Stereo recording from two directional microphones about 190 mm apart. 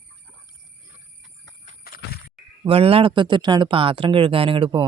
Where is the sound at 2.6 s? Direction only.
30° right (ahead or behind).